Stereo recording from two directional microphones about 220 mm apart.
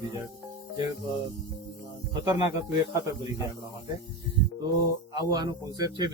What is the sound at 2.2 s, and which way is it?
Speech, 20° right (ahead or behind).